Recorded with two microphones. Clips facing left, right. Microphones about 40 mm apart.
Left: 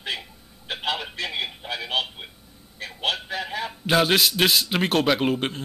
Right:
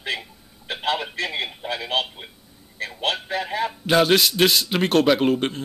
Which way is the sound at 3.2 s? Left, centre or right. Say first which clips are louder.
Right 4 dB; centre.